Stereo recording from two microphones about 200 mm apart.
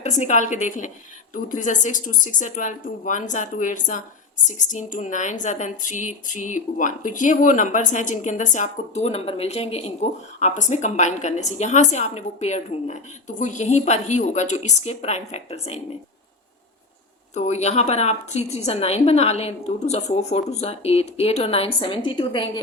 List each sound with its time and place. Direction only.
0.0 s a woman's voice: 35° left (ahead or behind)
17.3 s a woman's voice: 35° left (ahead or behind)